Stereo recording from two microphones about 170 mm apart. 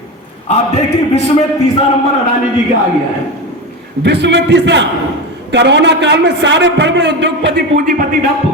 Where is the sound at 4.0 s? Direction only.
90° right.